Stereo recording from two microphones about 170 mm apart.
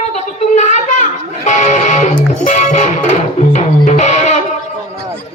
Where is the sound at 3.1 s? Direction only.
45° left (ahead or behind).